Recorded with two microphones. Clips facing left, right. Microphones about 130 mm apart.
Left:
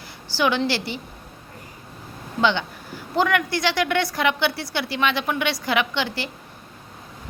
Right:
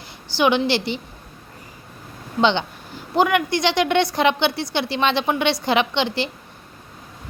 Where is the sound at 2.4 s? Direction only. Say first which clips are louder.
Right 3 dB; 25° right (ahead or behind).